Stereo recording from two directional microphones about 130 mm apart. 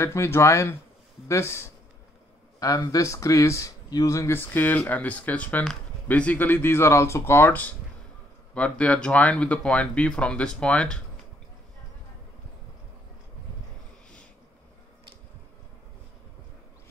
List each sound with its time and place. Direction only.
0.0 s speech: 20° left (ahead or behind)